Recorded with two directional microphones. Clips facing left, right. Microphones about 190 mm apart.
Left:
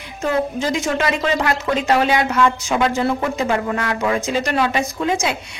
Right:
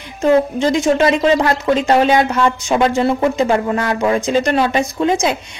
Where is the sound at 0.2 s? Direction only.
30° right (ahead or behind).